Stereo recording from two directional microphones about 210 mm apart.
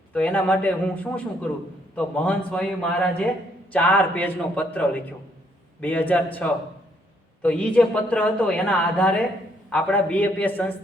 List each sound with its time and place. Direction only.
0.1 s a man's voice: 5° left (ahead or behind)